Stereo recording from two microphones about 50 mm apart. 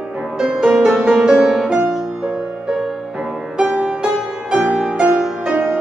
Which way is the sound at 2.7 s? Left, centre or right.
Centre.